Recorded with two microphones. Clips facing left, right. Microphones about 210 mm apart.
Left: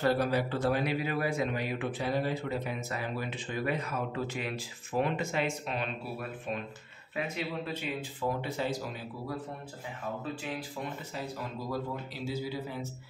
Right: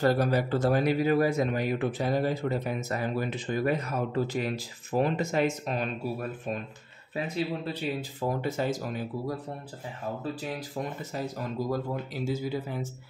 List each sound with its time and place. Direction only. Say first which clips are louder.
0.0 s speech: right 3 dB; 45° right (ahead or behind)
11.1 s speech: right 7 dB; 45° right (ahead or behind)